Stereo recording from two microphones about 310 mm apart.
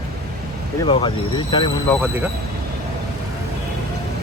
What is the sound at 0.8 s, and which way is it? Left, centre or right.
Speech, centre.